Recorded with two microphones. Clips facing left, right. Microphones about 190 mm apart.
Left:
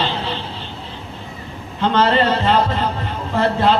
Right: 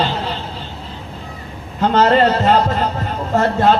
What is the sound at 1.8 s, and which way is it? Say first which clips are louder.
Speech: right 3 dB; 45° right (ahead or behind).